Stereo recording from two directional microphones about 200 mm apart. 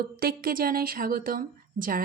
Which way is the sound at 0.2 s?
50° right (ahead or behind).